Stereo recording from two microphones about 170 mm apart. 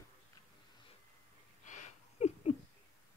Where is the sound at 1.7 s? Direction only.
45° left (ahead or behind).